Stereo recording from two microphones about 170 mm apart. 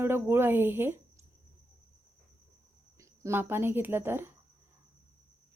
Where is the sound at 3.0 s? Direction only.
15° right (ahead or behind).